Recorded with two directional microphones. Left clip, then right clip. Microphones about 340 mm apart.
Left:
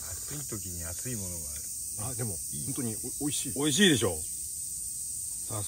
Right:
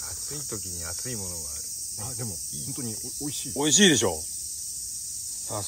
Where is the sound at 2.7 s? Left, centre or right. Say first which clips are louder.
Right 1 dB; centre.